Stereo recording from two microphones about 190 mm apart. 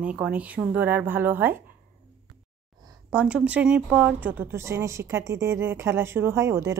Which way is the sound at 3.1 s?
5° right (ahead or behind).